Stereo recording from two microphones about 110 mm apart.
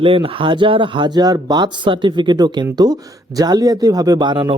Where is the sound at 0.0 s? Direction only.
55° right (ahead or behind).